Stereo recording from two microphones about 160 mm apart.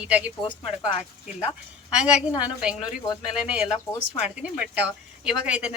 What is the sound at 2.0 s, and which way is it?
Speech, 5° right (ahead or behind).